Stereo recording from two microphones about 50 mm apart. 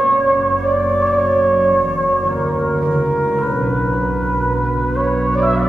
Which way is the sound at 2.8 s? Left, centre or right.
Centre.